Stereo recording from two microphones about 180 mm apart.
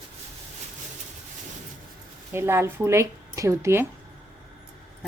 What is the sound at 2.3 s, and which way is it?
A woman's voice, 15° right (ahead or behind).